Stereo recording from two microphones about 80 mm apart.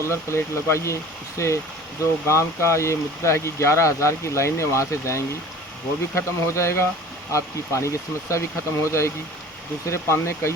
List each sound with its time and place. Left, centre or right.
0.0 s speech: left